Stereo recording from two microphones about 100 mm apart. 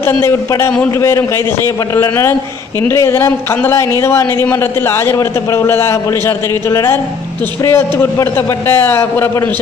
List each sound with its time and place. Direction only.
0.0 s speech: 25° left (ahead or behind)
2.0 s speech: 25° left (ahead or behind)